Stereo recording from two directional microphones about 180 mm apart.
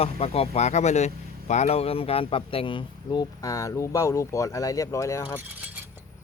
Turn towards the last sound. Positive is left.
turn(degrees=15)  # may be behind; listen again after turning